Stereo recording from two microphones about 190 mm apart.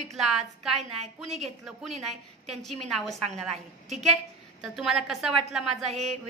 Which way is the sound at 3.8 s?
35° right (ahead or behind).